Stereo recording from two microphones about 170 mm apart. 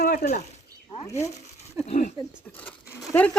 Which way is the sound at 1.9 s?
45° left (ahead or behind).